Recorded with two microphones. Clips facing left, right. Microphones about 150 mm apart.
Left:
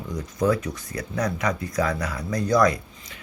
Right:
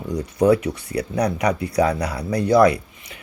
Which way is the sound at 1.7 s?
35° right (ahead or behind).